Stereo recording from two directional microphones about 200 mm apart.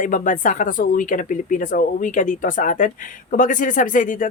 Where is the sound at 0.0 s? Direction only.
40° left (ahead or behind).